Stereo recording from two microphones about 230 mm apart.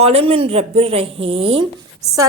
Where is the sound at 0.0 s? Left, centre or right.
Right.